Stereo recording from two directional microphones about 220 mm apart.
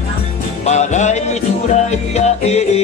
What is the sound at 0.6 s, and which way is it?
Music, 30° left (ahead or behind).